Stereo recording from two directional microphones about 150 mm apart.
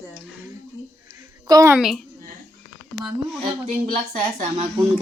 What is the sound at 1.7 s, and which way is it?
Speech, centre (ahead or behind).